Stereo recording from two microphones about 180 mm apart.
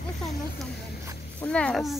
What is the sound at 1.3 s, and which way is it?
Speech, 5° left (ahead or behind).